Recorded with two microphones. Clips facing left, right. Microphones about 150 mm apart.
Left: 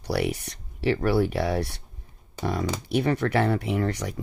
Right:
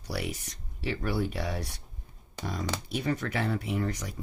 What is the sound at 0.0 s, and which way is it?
Speech, 65° left (ahead or behind).